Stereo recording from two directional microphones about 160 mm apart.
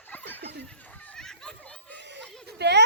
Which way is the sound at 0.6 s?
10° left (ahead or behind).